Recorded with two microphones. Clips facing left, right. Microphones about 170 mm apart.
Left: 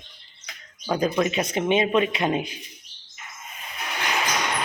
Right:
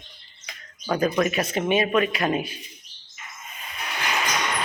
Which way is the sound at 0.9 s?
15° left (ahead or behind).